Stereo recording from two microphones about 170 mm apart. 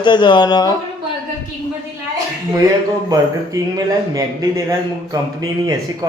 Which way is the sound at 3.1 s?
20° right (ahead or behind).